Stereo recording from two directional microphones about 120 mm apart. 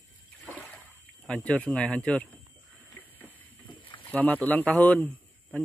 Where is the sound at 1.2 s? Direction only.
10° left (ahead or behind).